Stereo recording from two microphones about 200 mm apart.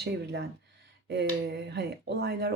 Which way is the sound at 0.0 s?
55° right (ahead or behind).